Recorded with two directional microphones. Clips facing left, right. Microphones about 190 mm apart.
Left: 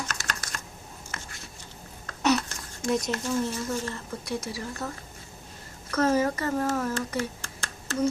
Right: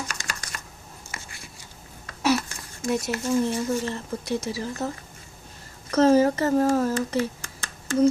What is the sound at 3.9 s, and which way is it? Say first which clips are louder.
Speech: right 5 dB; 25° right (ahead or behind).